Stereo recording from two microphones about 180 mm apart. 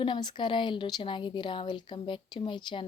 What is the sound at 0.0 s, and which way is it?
A woman's voice, 25° left (ahead or behind).